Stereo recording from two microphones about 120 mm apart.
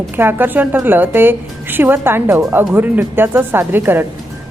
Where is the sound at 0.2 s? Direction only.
15° right (ahead or behind).